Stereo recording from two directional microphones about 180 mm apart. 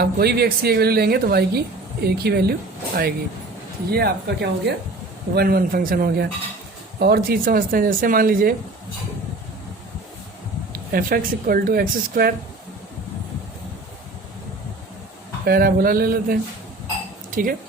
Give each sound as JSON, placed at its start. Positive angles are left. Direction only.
{"t": 0.0, "sound": "speech", "side_deg": -60}
{"t": 10.7, "sound": "speech", "side_deg": -55}
{"t": 15.4, "sound": "speech", "side_deg": -55}